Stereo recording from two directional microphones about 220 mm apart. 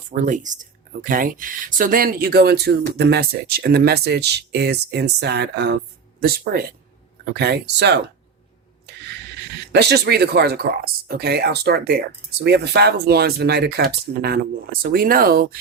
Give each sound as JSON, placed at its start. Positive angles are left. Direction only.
{"t": 0.1, "sound": "speech", "side_deg": -35}
{"t": 9.7, "sound": "speech", "side_deg": -45}